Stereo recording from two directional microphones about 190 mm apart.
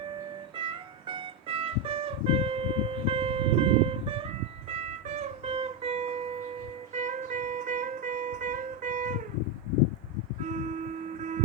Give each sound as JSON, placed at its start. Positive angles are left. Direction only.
{"t": 0.5, "sound": "music", "side_deg": -25}